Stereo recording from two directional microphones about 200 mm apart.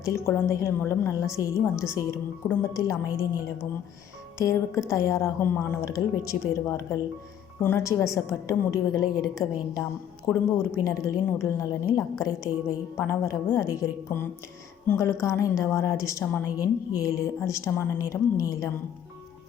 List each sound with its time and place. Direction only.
0.0 s a woman's voice: 15° left (ahead or behind)
4.4 s a woman's voice: 15° left (ahead or behind)
10.2 s speech: 5° left (ahead or behind)
10.8 s a woman's voice: 15° left (ahead or behind)